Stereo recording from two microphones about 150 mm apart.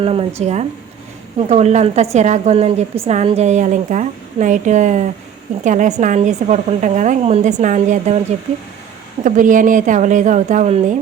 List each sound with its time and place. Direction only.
0.0 s a woman's voice: 40° right (ahead or behind)
9.2 s a woman's voice: 60° right (ahead or behind)